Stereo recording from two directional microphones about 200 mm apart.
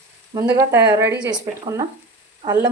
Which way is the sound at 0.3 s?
15° right (ahead or behind).